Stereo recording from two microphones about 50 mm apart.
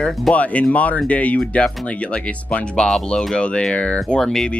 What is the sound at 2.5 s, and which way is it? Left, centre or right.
Speech, centre.